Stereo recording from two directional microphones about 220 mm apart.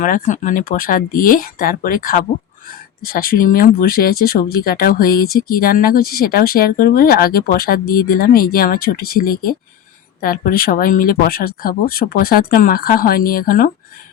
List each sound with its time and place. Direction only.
0.0 s speech: 35° left (ahead or behind)